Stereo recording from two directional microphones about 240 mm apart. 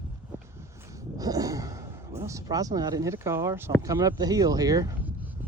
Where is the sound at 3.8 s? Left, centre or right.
Centre.